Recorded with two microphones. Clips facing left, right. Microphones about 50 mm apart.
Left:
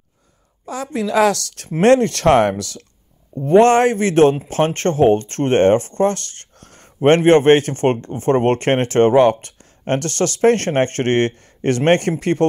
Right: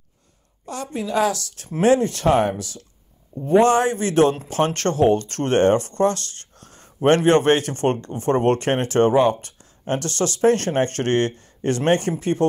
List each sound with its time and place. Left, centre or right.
0.9 s a woman's voice: left
3.4 s speech: left
7.2 s speech: left